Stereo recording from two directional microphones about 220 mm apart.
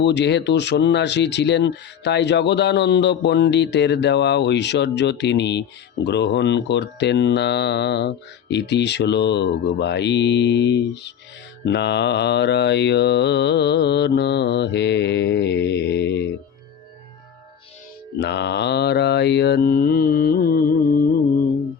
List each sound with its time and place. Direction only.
0.0 s speech: 50° left (ahead or behind)
18.2 s speech: 50° left (ahead or behind)